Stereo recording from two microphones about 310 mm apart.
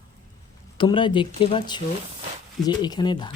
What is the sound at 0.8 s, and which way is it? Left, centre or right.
Speech, centre.